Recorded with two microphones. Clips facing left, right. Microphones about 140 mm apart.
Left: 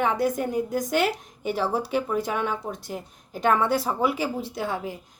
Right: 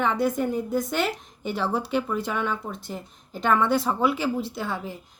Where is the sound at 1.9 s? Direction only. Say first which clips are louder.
Left 1 dB; 45° left (ahead or behind).